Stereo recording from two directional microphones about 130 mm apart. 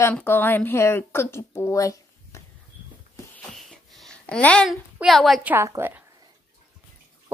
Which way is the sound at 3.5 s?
Centre (ahead or behind).